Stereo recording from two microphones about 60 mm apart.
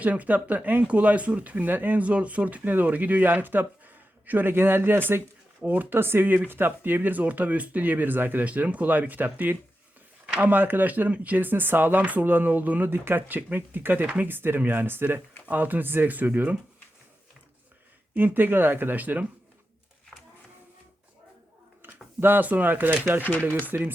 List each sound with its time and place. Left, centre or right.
0.0 s speech: right
10.2 s a sound: centre
10.5 s speech: right
18.1 s speech: right
21.8 s a sound: right
22.2 s speech: right